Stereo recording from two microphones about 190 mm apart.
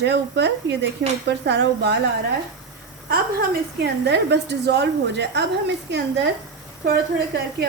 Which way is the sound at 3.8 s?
65° right (ahead or behind).